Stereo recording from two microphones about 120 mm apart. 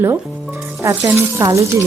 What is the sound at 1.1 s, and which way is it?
Speech, 25° right (ahead or behind).